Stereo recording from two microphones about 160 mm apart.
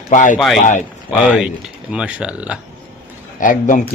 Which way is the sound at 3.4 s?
55° left (ahead or behind).